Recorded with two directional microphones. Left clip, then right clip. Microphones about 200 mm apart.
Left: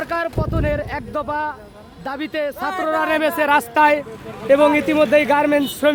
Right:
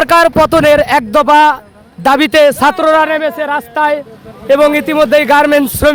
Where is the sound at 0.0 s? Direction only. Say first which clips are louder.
Right 16 dB; 50° right (ahead or behind).